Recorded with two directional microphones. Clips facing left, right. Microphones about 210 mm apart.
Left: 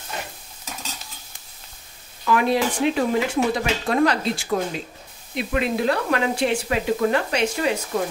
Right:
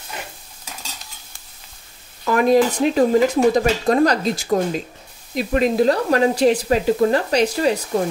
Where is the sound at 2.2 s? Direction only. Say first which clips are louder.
Right 5 dB; 45° right (ahead or behind).